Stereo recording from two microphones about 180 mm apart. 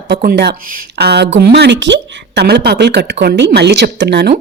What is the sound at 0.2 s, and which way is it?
A woman's voice, 60° right (ahead or behind).